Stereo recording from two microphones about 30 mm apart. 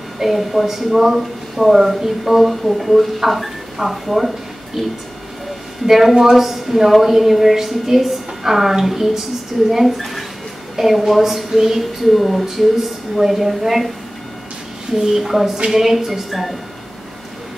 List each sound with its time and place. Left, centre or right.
0.2 s a woman's voice: centre
4.8 s speech: centre
5.9 s a woman's voice: centre
11.5 s a woman's voice: centre
12.0 s a woman's voice: centre
14.9 s speech: right
15.1 s a woman's voice: centre
16.3 s speech: centre